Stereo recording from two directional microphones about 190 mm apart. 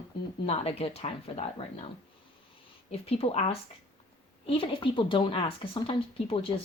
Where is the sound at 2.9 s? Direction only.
30° left (ahead or behind).